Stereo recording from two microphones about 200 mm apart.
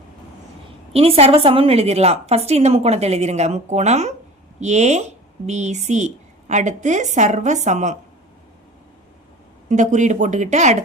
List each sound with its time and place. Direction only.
0.9 s a woman's voice: 30° right (ahead or behind)
9.6 s a woman's voice: 40° right (ahead or behind)